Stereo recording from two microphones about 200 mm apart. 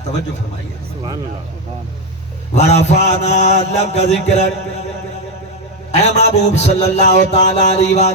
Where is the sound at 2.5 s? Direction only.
35° left (ahead or behind).